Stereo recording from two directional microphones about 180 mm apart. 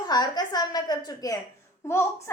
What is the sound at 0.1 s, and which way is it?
A woman's voice, 25° left (ahead or behind).